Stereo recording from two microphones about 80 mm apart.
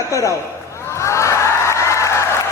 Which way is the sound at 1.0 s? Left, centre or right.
Left.